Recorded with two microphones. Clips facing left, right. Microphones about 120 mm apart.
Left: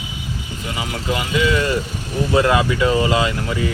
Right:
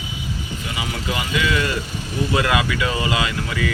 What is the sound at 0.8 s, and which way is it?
Speech, 35° left (ahead or behind).